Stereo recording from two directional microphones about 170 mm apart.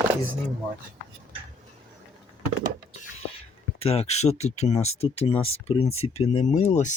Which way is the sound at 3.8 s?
35° left (ahead or behind).